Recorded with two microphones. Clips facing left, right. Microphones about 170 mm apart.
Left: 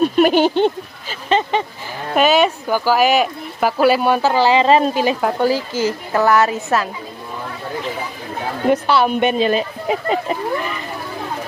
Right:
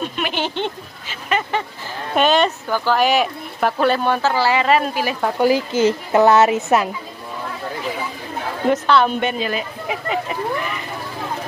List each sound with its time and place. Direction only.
0.0 s speech: 45° left (ahead or behind)
1.3 s a sound: 25° left (ahead or behind)
2.1 s speech: 5° left (ahead or behind); by 5.1 s 25° left (ahead or behind)
5.4 s speech: 20° right (ahead or behind)
8.8 s speech: 10° left (ahead or behind); by 10.1 s 35° left (ahead or behind)